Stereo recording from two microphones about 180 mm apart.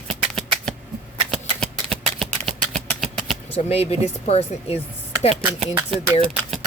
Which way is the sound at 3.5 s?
35° left (ahead or behind).